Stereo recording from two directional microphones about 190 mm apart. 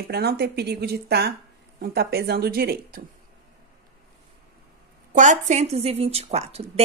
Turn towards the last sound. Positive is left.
turn(degrees=-35)  # may be behind; listen again after turning